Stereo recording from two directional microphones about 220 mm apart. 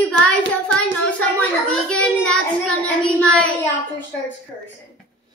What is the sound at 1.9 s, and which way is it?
Child singing, 5° left (ahead or behind).